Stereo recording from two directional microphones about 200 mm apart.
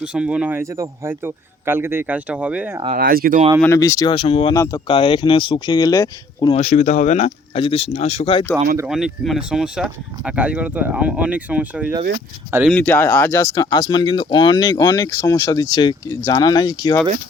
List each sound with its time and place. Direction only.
0.1 s a man's voice: 5° right (ahead or behind)
2.9 s speech: 45° right (ahead or behind)
3.6 s speech: 15° left (ahead or behind)
4.1 s speech: 25° left (ahead or behind)
4.6 s speech: 15° left (ahead or behind)
4.9 s speech: 25° left (ahead or behind)
6.6 s speech: 35° left (ahead or behind)
8.9 s a man's voice: 5° right (ahead or behind)
12.7 s speech: 10° left (ahead or behind)